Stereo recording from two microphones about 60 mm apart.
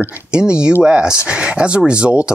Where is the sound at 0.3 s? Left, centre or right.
Centre.